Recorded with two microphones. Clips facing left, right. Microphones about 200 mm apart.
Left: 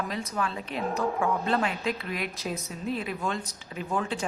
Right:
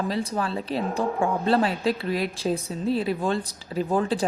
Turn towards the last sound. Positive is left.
turn(degrees=-35)  # may be behind; listen again after turning